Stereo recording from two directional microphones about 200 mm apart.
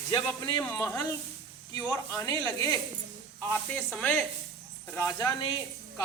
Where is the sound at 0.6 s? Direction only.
10° left (ahead or behind).